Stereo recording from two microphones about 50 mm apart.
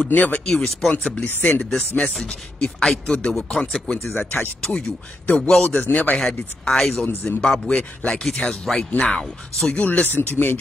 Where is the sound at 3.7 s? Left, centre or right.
Centre.